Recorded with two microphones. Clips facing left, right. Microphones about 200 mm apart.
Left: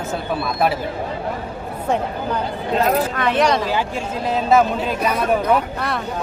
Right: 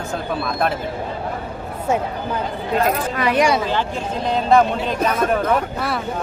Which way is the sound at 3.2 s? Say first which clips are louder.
Even; 5° right (ahead or behind).